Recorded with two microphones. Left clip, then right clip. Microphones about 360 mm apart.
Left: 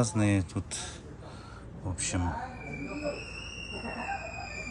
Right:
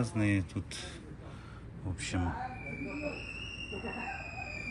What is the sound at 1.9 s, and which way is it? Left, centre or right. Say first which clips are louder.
Speech: left 3 dB; centre.